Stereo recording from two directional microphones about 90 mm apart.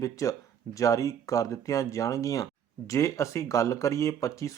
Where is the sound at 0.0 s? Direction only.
35° left (ahead or behind).